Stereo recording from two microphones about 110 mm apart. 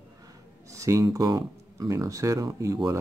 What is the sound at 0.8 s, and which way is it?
Speech, 30° right (ahead or behind).